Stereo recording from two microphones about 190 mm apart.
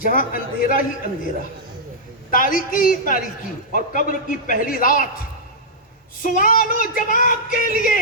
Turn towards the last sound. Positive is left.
turn(degrees=45)  # may be behind; listen again after turning